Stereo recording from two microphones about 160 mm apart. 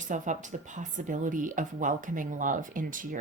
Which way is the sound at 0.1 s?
50° right (ahead or behind).